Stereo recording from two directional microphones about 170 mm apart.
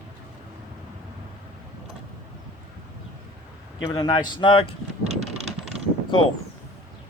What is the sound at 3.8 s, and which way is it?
Speech, 25° left (ahead or behind).